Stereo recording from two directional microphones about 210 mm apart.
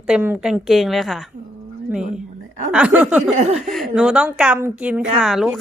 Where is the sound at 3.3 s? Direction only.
30° right (ahead or behind).